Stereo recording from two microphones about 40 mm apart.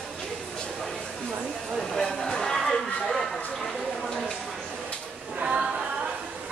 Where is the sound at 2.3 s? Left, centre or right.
Centre.